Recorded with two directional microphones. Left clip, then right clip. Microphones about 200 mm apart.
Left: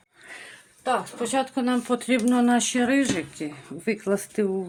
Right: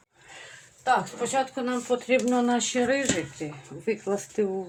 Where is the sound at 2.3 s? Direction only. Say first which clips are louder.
Left 2 dB; 35° left (ahead or behind).